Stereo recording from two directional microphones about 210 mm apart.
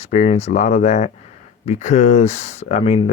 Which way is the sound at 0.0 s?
30° left (ahead or behind).